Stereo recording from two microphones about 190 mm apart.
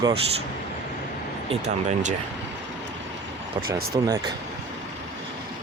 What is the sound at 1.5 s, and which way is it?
Speech, 35° right (ahead or behind).